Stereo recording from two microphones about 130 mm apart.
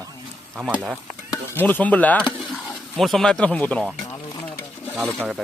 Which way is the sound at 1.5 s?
15° left (ahead or behind).